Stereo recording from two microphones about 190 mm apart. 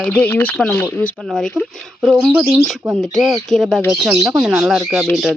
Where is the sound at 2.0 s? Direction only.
10° right (ahead or behind).